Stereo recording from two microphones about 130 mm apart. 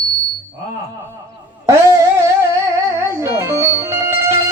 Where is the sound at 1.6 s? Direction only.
25° right (ahead or behind).